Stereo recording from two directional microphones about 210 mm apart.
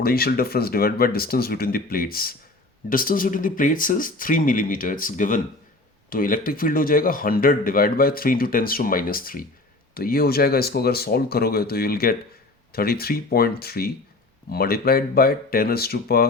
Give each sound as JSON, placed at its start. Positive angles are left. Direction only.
{"t": 0.0, "sound": "speech", "side_deg": 45}